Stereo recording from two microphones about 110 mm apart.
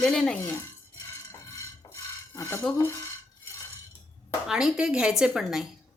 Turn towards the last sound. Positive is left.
turn(degrees=-5)  # may be behind; listen again after turning